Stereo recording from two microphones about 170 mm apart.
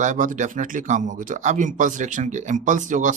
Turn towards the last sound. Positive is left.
turn(degrees=-50)  # may be behind; listen again after turning